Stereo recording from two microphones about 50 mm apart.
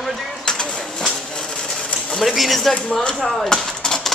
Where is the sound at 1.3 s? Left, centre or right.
Centre.